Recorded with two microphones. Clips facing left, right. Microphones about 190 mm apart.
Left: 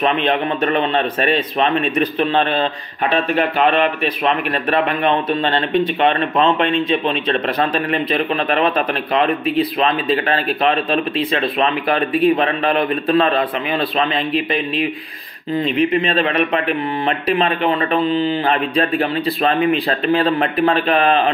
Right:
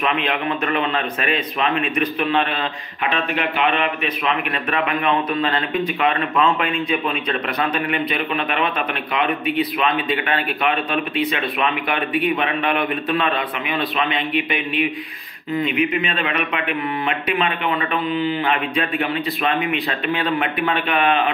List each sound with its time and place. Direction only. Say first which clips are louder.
0.0 s speech: left 4 dB; 35° left (ahead or behind)